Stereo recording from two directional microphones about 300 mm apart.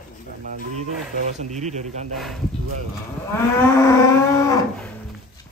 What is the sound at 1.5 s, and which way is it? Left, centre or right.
Speech, right.